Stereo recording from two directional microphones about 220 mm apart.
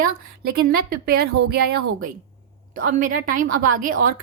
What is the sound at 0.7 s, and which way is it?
A woman's voice, 45° right (ahead or behind).